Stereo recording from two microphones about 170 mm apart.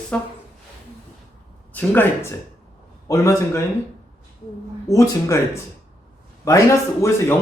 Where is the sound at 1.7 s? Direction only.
10° left (ahead or behind).